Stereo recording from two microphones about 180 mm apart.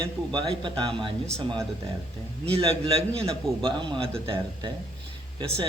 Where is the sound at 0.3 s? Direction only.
25° right (ahead or behind).